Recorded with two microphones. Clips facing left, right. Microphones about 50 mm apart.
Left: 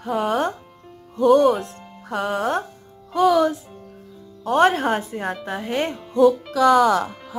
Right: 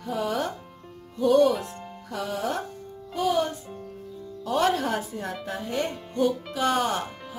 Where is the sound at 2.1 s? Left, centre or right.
Left.